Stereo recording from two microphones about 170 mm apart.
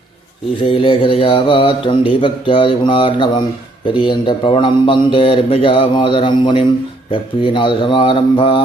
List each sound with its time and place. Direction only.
0.6 s speech: 30° left (ahead or behind)